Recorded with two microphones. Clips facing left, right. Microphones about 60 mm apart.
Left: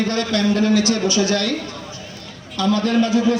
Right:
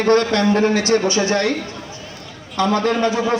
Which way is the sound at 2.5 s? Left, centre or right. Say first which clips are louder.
Even; right.